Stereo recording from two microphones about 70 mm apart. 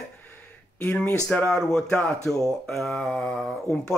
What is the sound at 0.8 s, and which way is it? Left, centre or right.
Speech, left.